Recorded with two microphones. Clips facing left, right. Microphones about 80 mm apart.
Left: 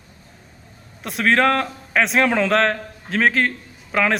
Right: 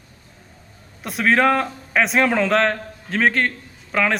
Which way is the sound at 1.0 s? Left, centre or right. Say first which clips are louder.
Even; centre.